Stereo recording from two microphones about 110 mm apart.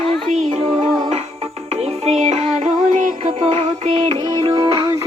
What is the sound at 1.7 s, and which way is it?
Music, 80° right.